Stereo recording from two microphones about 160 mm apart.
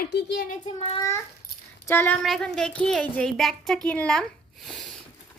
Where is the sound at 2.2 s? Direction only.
5° left (ahead or behind).